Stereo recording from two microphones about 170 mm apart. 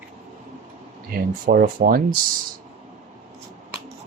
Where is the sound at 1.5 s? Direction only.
60° right (ahead or behind).